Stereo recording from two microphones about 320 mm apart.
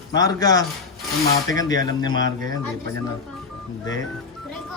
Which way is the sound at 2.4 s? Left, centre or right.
Centre.